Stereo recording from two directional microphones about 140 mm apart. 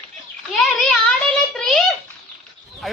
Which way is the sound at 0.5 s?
5° left (ahead or behind).